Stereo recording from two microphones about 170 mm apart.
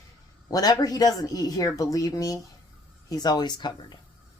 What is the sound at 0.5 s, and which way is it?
A woman's voice, 20° left (ahead or behind).